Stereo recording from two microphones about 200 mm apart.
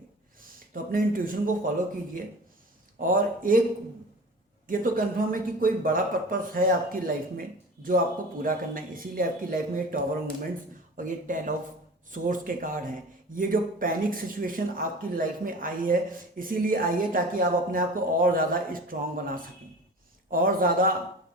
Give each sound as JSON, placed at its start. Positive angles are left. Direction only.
{"t": 0.7, "sound": "speech", "side_deg": -45}
{"t": 3.0, "sound": "speech", "side_deg": -40}
{"t": 4.7, "sound": "speech", "side_deg": -45}